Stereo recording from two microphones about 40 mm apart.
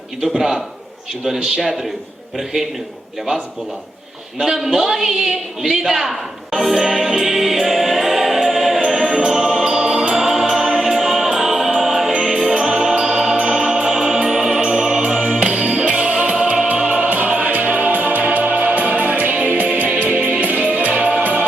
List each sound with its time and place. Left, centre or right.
0.2 s a man's voice: centre
4.4 s a sound: centre
8.9 s music: centre
12.5 s music: centre
14.6 s music: centre
17.1 s music: right